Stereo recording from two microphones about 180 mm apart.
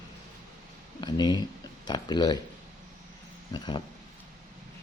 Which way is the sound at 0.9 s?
25° left (ahead or behind).